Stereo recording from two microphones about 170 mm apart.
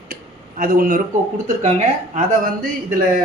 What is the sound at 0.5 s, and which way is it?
Speech, 60° right (ahead or behind).